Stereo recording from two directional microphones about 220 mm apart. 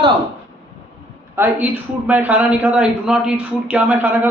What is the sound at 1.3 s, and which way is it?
A woman's voice, 10° right (ahead or behind).